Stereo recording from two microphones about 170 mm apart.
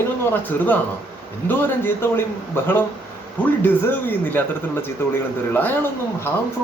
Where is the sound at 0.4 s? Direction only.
10° left (ahead or behind).